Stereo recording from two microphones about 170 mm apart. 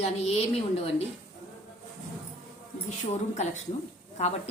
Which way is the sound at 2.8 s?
40° left (ahead or behind).